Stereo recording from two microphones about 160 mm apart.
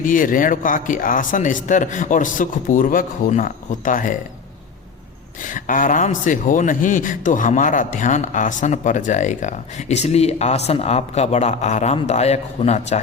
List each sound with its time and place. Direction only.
0.0 s speech: 55° left (ahead or behind)
5.4 s a man's voice: 55° left (ahead or behind)